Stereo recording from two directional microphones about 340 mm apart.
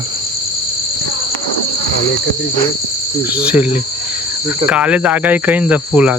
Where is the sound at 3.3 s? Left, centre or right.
Centre.